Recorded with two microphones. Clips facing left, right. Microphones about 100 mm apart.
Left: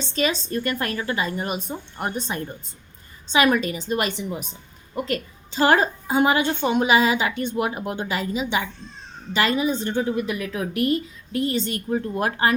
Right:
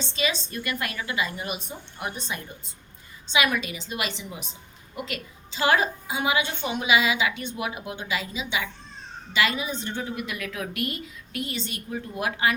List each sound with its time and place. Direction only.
0.0 s a woman's voice: 45° left (ahead or behind); by 11.5 s 30° left (ahead or behind)
11.5 s a woman's voice: 40° left (ahead or behind)